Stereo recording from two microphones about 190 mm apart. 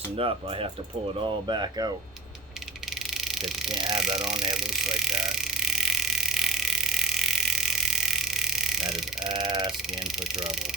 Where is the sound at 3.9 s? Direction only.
Centre (ahead or behind).